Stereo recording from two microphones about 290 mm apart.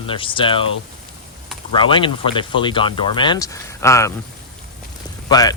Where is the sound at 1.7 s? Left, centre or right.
Centre.